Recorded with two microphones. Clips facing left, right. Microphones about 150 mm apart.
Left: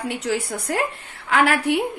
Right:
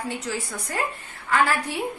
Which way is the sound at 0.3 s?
65° left (ahead or behind).